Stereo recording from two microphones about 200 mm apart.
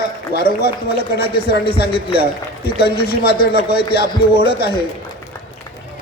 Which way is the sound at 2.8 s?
50° left (ahead or behind).